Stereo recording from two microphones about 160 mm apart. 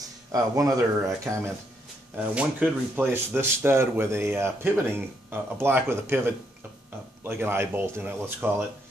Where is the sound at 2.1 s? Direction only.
10° right (ahead or behind).